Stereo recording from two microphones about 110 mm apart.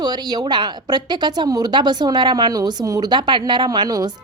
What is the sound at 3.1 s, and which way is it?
A woman's voice, 45° right (ahead or behind).